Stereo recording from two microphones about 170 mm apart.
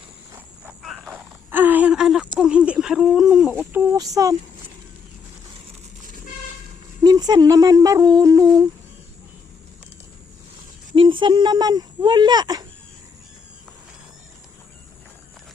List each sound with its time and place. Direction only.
0.3 s frog: 5° right (ahead or behind)
1.0 s a sound: 10° right (ahead or behind)
2.4 s speech: 5° right (ahead or behind)
7.0 s speech: 25° right (ahead or behind)
10.9 s speech: 30° right (ahead or behind)